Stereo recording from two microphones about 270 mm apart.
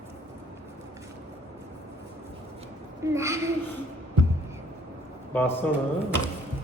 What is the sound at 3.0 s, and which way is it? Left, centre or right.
Speech, centre.